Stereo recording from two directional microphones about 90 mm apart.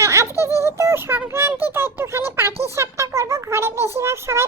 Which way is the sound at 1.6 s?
25° right (ahead or behind).